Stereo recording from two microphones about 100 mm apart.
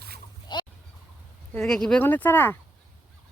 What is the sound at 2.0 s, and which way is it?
Speech, 20° left (ahead or behind).